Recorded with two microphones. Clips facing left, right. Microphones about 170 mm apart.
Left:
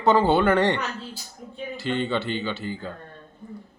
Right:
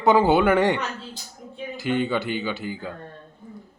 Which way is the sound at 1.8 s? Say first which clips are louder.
Right 2 dB; 10° right (ahead or behind).